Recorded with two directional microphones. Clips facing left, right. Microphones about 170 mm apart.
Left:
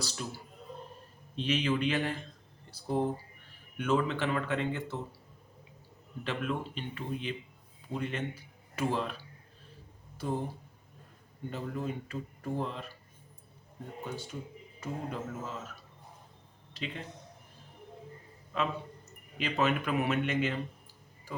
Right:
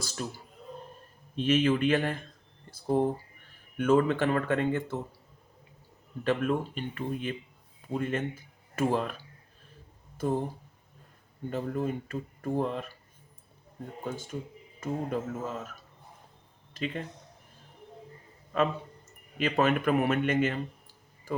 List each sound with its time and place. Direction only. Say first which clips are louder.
0.0 s speech: right 3 dB; 50° right (ahead or behind)
1.4 s speech: right 5 dB; 50° right (ahead or behind)
2.6 s a sound: right 6 dB; 50° right (ahead or behind)
3.8 s speech: right 6 dB; 50° right (ahead or behind)
6.2 s speech: right 7 dB; 45° right (ahead or behind)
10.2 s speech: right 5 dB; 50° right (ahead or behind)
11.5 s speech: right 5 dB; 50° right (ahead or behind)
14.0 s speech: right 4 dB; 50° right (ahead or behind)
16.7 s speech: right 6 dB; 50° right (ahead or behind)
18.5 s speech: right 5 dB; 50° right (ahead or behind)
21.3 s a sound: right 7 dB; 50° right (ahead or behind)